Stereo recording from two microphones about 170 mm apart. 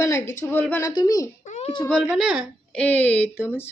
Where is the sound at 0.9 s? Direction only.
25° left (ahead or behind).